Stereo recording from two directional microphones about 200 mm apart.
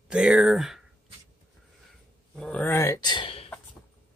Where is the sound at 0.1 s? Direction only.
5° right (ahead or behind).